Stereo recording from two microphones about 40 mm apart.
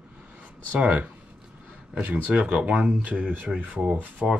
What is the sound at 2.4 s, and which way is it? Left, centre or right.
Speech, right.